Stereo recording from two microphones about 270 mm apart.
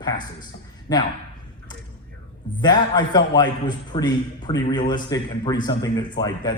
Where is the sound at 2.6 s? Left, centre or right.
Centre.